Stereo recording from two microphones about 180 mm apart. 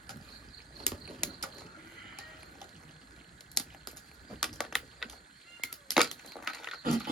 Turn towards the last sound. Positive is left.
turn(degrees=0)  # may be behind; listen again after turning